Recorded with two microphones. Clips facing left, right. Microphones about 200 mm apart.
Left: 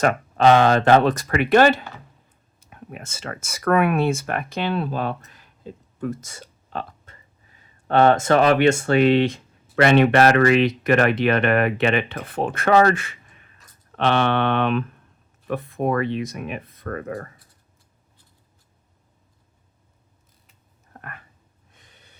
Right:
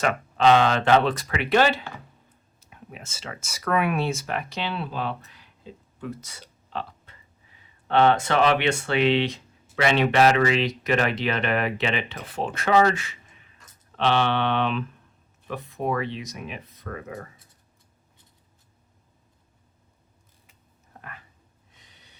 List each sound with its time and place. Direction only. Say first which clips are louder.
0.0 s speech: left 3 dB; 45° left (ahead or behind)
21.7 s snort: left 3 dB; 50° left (ahead or behind)